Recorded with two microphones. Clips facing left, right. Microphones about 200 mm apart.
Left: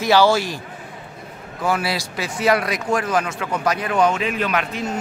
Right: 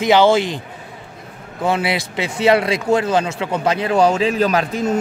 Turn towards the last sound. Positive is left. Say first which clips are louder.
# right 5 dB
turn(degrees=-35)  # may be behind; listen again after turning